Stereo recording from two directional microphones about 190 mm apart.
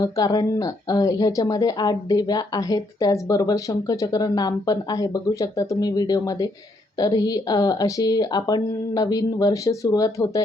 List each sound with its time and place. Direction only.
0.0 s speech: 20° left (ahead or behind)